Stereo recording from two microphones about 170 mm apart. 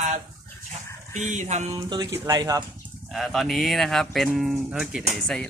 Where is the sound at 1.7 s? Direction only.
20° right (ahead or behind).